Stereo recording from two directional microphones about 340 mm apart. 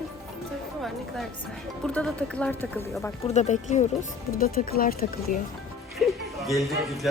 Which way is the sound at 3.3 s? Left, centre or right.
Left.